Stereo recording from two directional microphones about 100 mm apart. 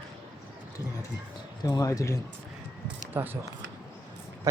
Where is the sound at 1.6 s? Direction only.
35° left (ahead or behind).